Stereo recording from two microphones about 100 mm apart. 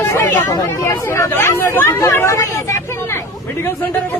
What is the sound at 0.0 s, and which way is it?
Hubbub, 25° left (ahead or behind).